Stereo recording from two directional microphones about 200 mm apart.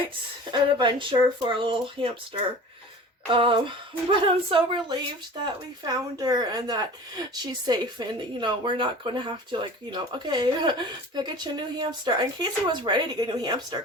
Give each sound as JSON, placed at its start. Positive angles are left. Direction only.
{"t": 0.5, "sound": "a woman's voice", "side_deg": -25}